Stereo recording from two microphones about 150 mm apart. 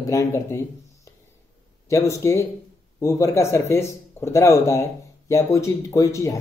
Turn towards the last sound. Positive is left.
turn(degrees=20)  # may be behind; listen again after turning